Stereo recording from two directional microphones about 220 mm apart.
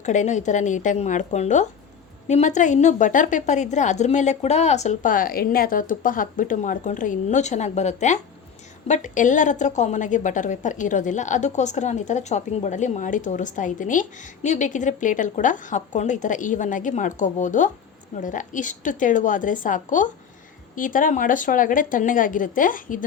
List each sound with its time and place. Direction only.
0.0 s a woman's voice: 35° left (ahead or behind)